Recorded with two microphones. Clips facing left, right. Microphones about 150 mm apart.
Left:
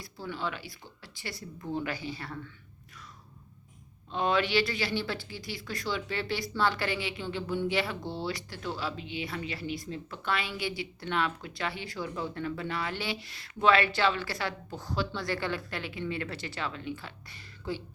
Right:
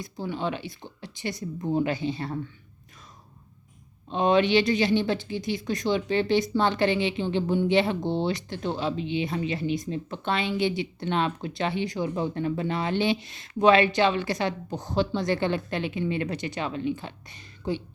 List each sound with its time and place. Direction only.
0.0 s speech: 20° right (ahead or behind)
4.1 s speech: 20° right (ahead or behind)